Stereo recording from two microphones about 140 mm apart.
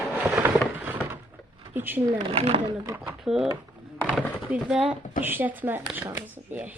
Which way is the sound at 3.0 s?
5° right (ahead or behind).